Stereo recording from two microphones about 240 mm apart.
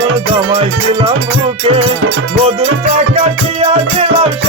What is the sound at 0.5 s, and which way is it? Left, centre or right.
Music, right.